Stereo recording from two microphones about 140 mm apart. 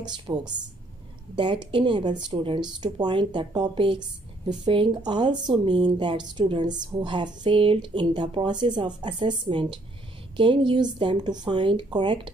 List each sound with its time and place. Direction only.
0.0 s speech: 30° right (ahead or behind)